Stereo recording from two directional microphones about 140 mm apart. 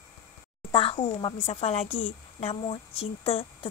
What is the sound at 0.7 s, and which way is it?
A woman's voice, 40° left (ahead or behind).